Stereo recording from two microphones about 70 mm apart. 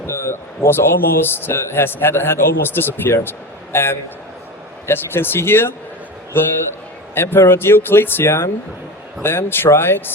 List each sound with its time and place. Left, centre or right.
0.0 s a man's voice: left